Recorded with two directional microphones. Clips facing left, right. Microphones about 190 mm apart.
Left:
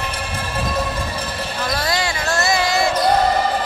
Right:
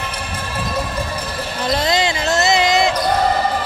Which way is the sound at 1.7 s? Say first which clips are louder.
Right 6 dB; 20° right (ahead or behind).